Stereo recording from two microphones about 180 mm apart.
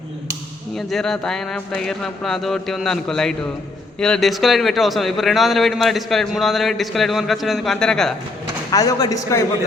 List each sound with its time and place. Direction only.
0.8 s a man's voice: centre (ahead or behind)
8.7 s a man's voice: 20° left (ahead or behind)